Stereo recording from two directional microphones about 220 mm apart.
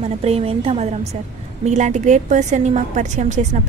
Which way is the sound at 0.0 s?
25° right (ahead or behind).